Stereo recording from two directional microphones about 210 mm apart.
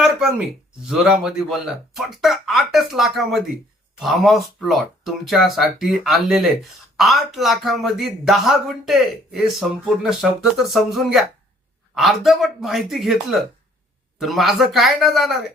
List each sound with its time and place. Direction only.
0.0 s a sound: 5° right (ahead or behind)
0.9 s speech: 5° right (ahead or behind)
14.2 s speech: centre (ahead or behind)